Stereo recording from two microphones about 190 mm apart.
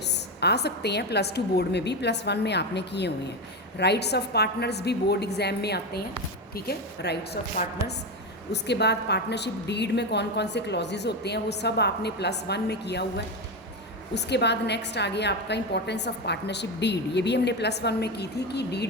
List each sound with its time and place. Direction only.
0.1 s a woman's voice: 60° left (ahead or behind)
8.6 s a woman's voice: 60° left (ahead or behind)